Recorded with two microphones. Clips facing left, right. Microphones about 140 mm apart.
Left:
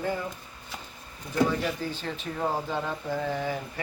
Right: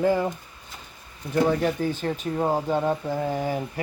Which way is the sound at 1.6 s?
50° right (ahead or behind).